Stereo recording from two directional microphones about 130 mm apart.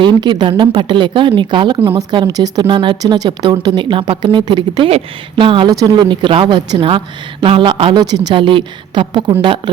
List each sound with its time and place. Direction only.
0.0 s speech: 35° right (ahead or behind)